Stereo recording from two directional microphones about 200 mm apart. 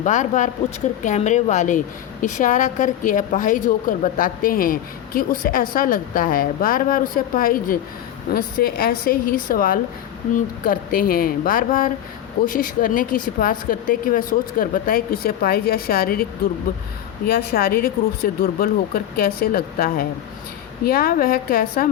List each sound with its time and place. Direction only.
0.0 s a woman's voice: 40° left (ahead or behind)
17.2 s a woman's voice: 50° left (ahead or behind)